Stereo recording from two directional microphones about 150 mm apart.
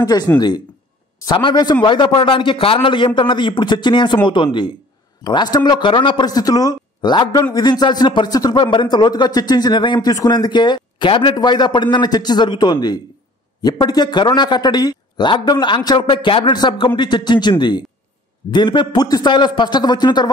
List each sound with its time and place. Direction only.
0.3 s speech: 15° left (ahead or behind)
1.2 s a man's voice: 30° left (ahead or behind)